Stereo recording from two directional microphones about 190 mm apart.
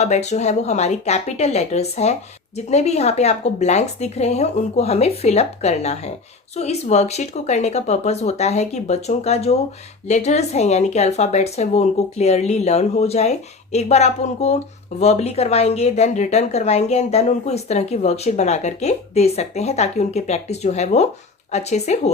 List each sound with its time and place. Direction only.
0.0 s a woman's voice: 35° left (ahead or behind)